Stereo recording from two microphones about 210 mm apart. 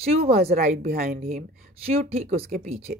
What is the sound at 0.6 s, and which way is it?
Speech, 45° right (ahead or behind).